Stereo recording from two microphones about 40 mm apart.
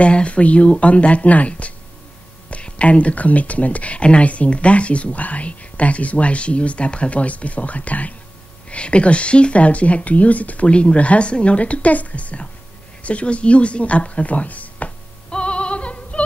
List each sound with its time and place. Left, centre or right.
0.0 s speech: left
15.2 s music: left